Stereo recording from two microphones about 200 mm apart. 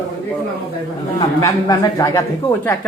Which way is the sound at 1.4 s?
20° left (ahead or behind).